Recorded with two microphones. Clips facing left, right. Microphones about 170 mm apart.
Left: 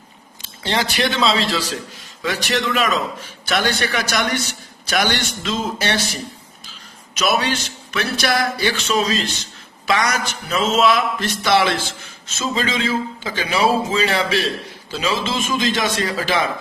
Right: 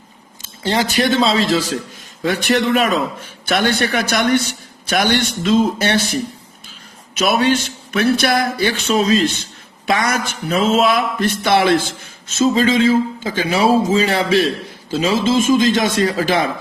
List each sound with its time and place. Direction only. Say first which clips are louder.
0.4 s a man's voice: right 3 dB; 45° right (ahead or behind)
7.2 s a man's voice: right 4 dB; 50° right (ahead or behind)